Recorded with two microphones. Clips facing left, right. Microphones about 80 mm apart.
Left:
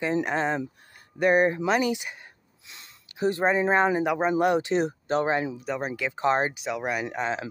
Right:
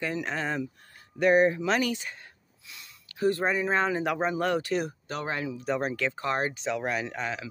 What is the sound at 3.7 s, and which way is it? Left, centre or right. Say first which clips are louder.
Speech: left 4 dB; left.